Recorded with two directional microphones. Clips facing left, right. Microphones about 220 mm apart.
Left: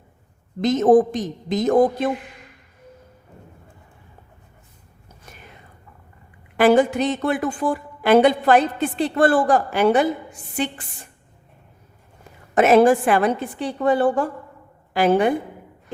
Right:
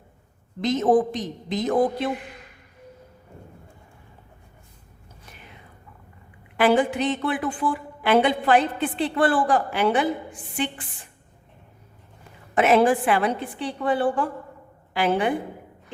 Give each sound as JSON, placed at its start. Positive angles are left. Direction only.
{"t": 0.6, "sound": "a woman's voice", "side_deg": 45}
{"t": 6.6, "sound": "a woman's voice", "side_deg": 45}
{"t": 12.5, "sound": "a woman's voice", "side_deg": 45}